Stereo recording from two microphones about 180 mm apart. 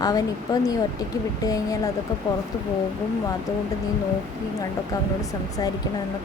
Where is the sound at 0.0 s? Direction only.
20° left (ahead or behind).